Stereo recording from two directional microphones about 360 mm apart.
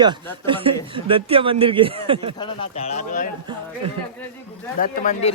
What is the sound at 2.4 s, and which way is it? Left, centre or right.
Speech, centre.